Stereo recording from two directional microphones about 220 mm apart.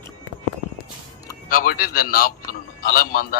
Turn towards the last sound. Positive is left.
turn(degrees=40)  # may be behind; listen again after turning